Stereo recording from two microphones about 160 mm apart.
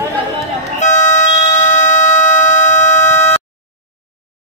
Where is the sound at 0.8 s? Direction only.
50° left (ahead or behind).